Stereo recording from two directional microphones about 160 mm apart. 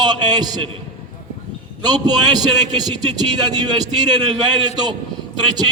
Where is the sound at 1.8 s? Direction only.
25° right (ahead or behind).